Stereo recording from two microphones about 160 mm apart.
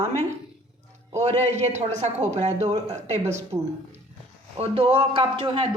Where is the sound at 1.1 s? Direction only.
45° right (ahead or behind).